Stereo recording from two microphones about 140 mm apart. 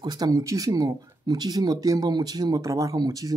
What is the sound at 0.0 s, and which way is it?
Speech, 30° right (ahead or behind).